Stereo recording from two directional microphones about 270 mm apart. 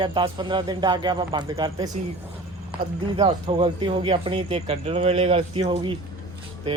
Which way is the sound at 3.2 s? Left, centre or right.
Centre.